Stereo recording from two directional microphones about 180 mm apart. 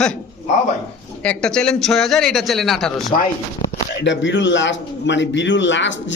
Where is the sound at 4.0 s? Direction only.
80° left.